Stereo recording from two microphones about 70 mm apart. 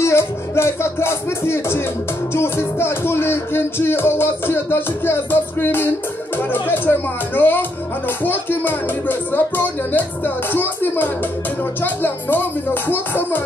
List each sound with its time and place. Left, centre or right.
0.0 s music: left
6.3 s speech: left